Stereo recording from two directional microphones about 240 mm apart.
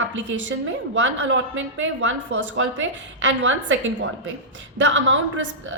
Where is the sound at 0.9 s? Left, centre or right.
Right.